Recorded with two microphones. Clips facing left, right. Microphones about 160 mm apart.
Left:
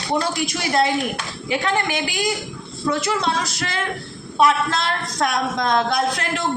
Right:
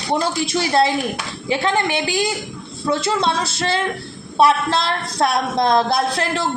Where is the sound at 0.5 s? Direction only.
30° right (ahead or behind).